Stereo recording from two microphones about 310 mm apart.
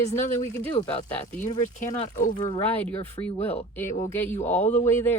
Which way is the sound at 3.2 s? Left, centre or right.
Centre.